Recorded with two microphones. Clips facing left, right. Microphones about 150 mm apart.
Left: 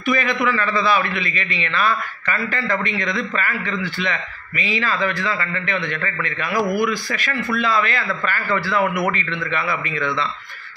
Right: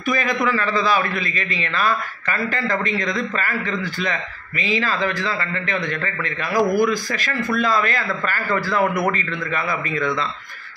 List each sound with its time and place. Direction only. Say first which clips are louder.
0.0 s a man's voice: left 1 dB; 40° right (ahead or behind)